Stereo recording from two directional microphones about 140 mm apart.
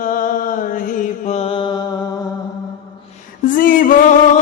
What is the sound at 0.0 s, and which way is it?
Music, 80° left.